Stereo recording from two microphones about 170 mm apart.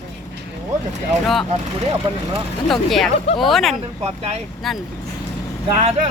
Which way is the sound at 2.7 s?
Centre (ahead or behind).